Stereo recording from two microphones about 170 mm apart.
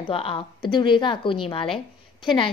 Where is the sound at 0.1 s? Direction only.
30° left (ahead or behind).